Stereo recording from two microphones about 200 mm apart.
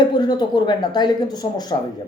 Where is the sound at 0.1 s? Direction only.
20° left (ahead or behind).